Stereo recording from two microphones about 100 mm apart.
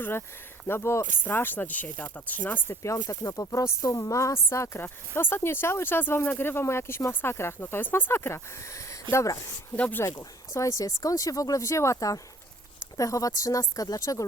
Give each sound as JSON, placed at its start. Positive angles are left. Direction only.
{"t": 0.0, "sound": "speech", "side_deg": 20}
{"t": 9.7, "sound": "speech", "side_deg": 15}
{"t": 10.0, "sound": "speech", "side_deg": 30}